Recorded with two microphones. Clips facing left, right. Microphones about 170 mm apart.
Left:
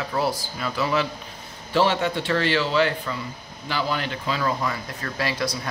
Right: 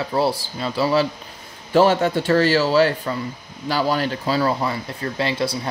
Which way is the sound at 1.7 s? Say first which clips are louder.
Right 5 dB; 45° right (ahead or behind).